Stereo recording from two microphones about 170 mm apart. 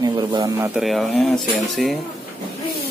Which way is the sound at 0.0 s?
20° right (ahead or behind).